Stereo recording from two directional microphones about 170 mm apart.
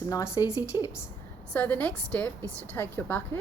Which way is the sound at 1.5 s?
10° left (ahead or behind).